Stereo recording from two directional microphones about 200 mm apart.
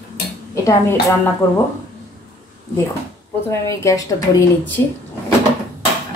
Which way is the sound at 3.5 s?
15° left (ahead or behind).